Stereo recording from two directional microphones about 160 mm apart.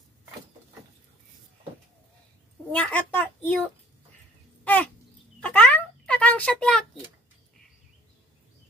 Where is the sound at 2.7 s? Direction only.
10° left (ahead or behind).